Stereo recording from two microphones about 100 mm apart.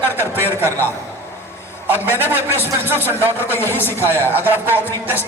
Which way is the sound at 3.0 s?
25° left (ahead or behind).